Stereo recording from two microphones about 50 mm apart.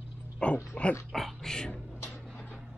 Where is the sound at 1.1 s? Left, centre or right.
Centre.